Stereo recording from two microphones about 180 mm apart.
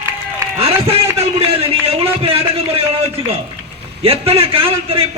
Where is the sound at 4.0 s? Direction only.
35° right (ahead or behind).